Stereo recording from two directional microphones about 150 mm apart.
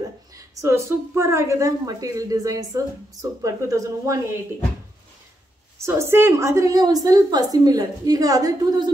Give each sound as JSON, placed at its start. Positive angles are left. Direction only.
{"t": 0.3, "sound": "a woman's voice", "side_deg": -20}
{"t": 5.8, "sound": "a woman's voice", "side_deg": -20}